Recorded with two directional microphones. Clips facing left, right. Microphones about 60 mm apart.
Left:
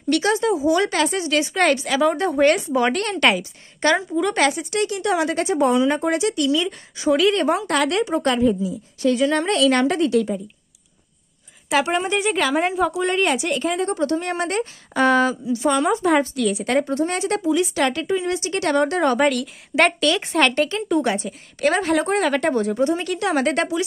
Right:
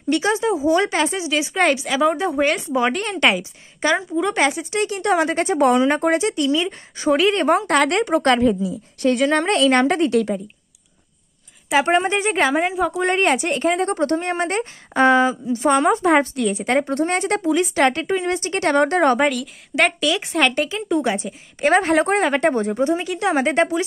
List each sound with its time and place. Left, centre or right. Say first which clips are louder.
0.1 s a woman's voice: even; centre
4.4 s speech: even; right
7.4 s a woman's voice: right 3 dB; right
9.0 s speech: right 1 dB; right
10.1 s a woman's voice: right 1 dB; right
11.8 s speech: right 5 dB; right
12.5 s a woman's voice: even; centre
12.9 s speech: right 2 dB; right
14.2 s a woman's voice: right 1 dB; right
15.4 s speech: right 3 dB; right
16.9 s a woman's voice: right 2 dB; right
19.1 s a woman's voice: even; centre
21.5 s a woman's voice: right 3 dB; right